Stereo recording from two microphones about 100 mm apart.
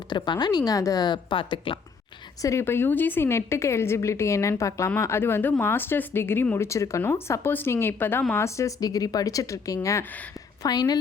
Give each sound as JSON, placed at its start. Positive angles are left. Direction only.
{"t": 0.1, "sound": "a woman's voice", "side_deg": 50}
{"t": 2.4, "sound": "speech", "side_deg": 30}